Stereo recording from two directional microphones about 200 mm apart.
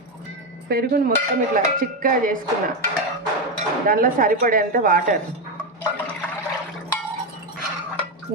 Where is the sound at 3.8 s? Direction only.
45° right (ahead or behind).